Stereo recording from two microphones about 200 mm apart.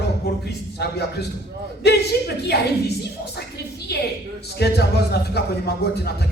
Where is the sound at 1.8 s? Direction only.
55° left (ahead or behind).